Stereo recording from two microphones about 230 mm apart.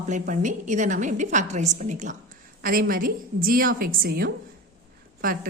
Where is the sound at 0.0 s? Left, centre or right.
Right.